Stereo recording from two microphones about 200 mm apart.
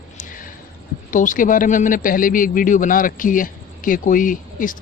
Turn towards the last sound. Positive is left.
turn(degrees=40)  # may be behind; listen again after turning